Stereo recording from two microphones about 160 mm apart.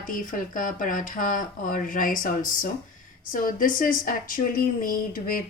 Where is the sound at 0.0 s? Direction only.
55° left (ahead or behind).